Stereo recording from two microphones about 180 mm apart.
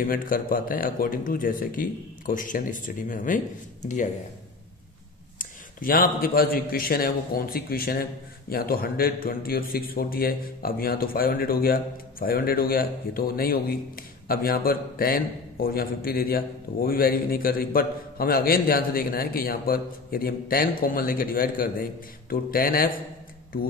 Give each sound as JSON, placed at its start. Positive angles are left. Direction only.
{"t": 0.0, "sound": "a man's voice", "side_deg": 50}
{"t": 5.4, "sound": "a man's voice", "side_deg": 50}